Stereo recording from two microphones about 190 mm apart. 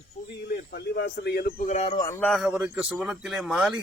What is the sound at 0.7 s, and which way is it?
Speech, 55° left (ahead or behind).